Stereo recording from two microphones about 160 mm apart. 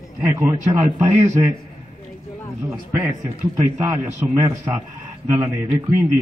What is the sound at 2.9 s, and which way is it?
A man's voice, 10° right (ahead or behind).